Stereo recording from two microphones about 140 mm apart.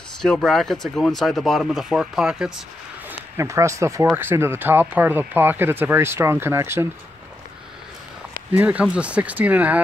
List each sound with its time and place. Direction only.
0.2 s speech: 5° left (ahead or behind)
3.3 s speech: 20° right (ahead or behind)
8.5 s speech: 10° right (ahead or behind)